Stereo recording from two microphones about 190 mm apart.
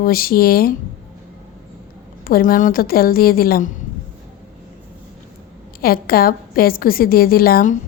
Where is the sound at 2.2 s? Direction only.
50° left (ahead or behind).